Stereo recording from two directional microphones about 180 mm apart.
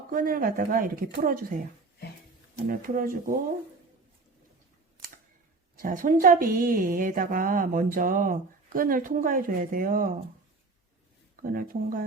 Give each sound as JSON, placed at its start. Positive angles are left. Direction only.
{"t": 0.1, "sound": "a woman's voice", "side_deg": -50}
{"t": 2.6, "sound": "a woman's voice", "side_deg": -50}
{"t": 5.7, "sound": "a woman's voice", "side_deg": -50}
{"t": 11.4, "sound": "a woman's voice", "side_deg": -50}